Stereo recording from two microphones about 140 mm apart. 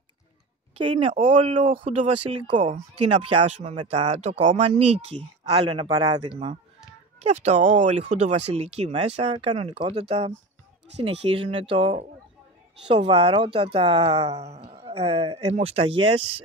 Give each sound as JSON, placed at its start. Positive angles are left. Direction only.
{"t": 0.7, "sound": "speech", "side_deg": -40}
{"t": 5.9, "sound": "speech", "side_deg": -25}
{"t": 7.2, "sound": "speech", "side_deg": -50}